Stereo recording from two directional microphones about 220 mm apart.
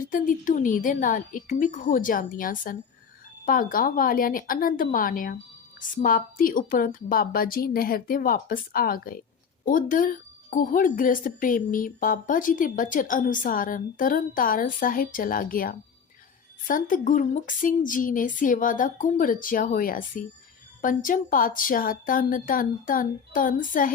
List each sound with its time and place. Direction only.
0.0 s speech: 40° left (ahead or behind)